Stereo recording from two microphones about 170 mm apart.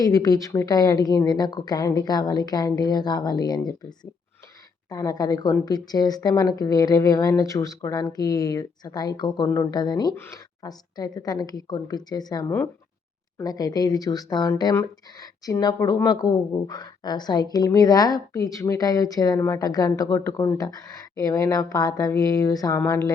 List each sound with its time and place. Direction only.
0.0 s speech: 20° left (ahead or behind)
4.9 s speech: 20° left (ahead or behind)